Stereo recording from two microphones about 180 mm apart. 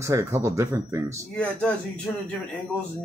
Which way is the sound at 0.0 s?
15° right (ahead or behind).